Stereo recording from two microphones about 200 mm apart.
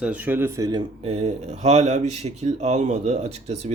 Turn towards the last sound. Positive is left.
turn(degrees=-30)  # may be behind; listen again after turning